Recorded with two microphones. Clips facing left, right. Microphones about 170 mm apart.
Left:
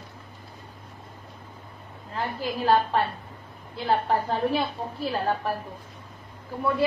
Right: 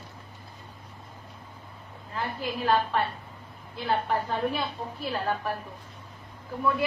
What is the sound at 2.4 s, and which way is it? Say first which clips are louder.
Speech: left 3 dB; 35° left (ahead or behind).